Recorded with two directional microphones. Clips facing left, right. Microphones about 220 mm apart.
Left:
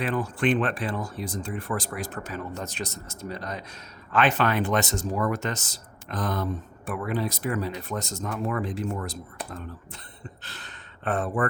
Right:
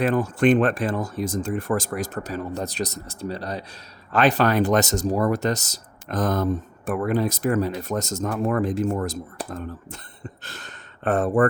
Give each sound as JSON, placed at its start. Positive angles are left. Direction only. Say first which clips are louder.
{"t": 0.0, "sound": "speech", "louder": "right 6 dB", "side_deg": -45}